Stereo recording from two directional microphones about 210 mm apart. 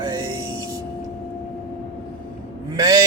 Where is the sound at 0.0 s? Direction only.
20° right (ahead or behind).